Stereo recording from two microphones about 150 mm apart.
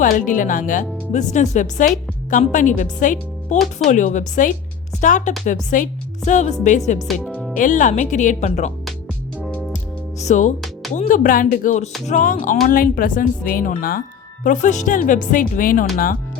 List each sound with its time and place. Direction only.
0.0 s a woman's voice: 60° left (ahead or behind)
7.1 s speech: 5° left (ahead or behind)
7.5 s speech: 60° left (ahead or behind)
9.4 s music: 10° left (ahead or behind)
10.2 s speech: 55° left (ahead or behind); by 14.0 s 75° left (ahead or behind)
14.4 s speech: 55° left (ahead or behind)